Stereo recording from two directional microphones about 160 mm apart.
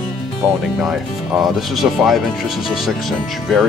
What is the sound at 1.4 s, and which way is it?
Speech, centre (ahead or behind).